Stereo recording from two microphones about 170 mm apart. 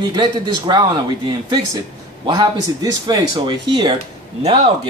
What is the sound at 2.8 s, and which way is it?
Speech, 25° right (ahead or behind).